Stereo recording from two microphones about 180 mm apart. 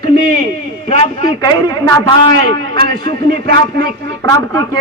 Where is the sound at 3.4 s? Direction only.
65° right (ahead or behind).